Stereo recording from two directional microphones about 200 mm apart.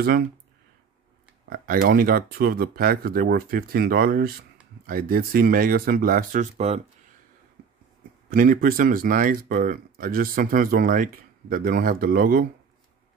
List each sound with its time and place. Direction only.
1.5 s speech: 45° right (ahead or behind)
8.3 s speech: 45° right (ahead or behind)